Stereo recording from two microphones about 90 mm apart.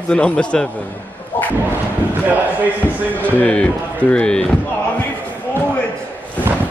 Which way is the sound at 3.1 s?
15° left (ahead or behind).